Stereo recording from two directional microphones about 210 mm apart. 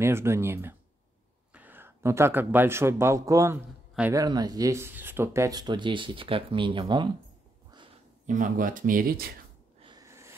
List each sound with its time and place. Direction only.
0.0 s speech: 10° right (ahead or behind)
4.2 s speech: 20° right (ahead or behind)
8.3 s speech: 40° right (ahead or behind)
9.8 s a sound: 20° right (ahead or behind)